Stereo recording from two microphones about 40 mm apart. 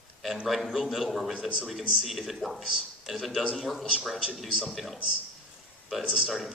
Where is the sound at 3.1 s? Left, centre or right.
Centre.